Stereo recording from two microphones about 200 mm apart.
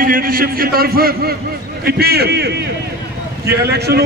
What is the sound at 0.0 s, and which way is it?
A man's voice, 45° right (ahead or behind).